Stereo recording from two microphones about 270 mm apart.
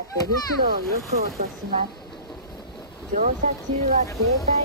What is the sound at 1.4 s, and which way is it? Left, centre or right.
Speech, right.